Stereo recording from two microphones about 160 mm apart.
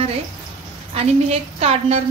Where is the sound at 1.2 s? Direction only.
40° right (ahead or behind).